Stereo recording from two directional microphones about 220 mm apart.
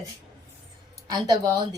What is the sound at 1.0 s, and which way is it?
Speech, 15° right (ahead or behind).